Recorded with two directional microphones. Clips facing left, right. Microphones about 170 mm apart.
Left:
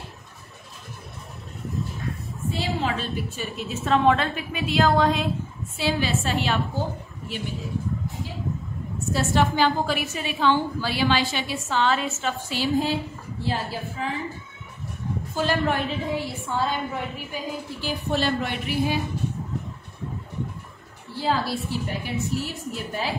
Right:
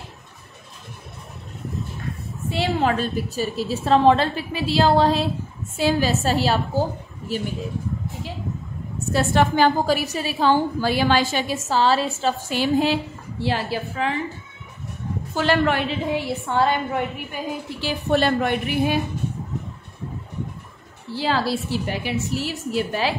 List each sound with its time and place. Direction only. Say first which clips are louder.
2.5 s a sound: right 6 dB; 70° right (ahead or behind)
2.9 s a woman's voice: right 5 dB; 40° right (ahead or behind)
5.8 s a woman's voice: right 5 dB; 45° right (ahead or behind)
9.1 s a woman's voice: right 3 dB; 55° right (ahead or behind)
9.8 s a woman's voice: right 5 dB; 40° right (ahead or behind)
12.4 s a woman's voice: right 3 dB; 65° right (ahead or behind)
13.4 s a woman's voice: right 4 dB; 80° right
15.3 s a woman's voice: right 4 dB; 75° right (ahead or behind); by 18.9 s 55° right (ahead or behind)
21.2 s a woman's voice: right 2 dB; 90° right